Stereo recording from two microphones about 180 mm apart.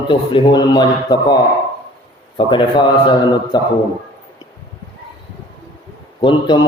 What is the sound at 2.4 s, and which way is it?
Mantra, 25° left (ahead or behind).